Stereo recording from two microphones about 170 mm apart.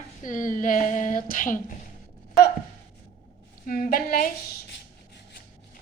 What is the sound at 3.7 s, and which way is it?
Speech, 55° left (ahead or behind).